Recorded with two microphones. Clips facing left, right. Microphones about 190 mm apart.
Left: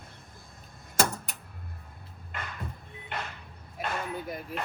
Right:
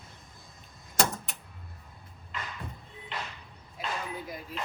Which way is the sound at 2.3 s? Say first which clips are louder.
Even; 55° left (ahead or behind).